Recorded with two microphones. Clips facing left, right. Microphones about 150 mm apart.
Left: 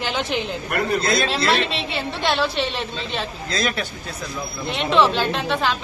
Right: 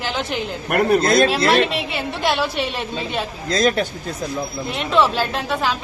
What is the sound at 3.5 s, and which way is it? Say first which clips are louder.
Speech: right 7 dB; 45° right (ahead or behind).